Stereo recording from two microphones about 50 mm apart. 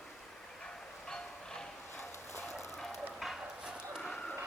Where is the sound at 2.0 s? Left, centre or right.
Left.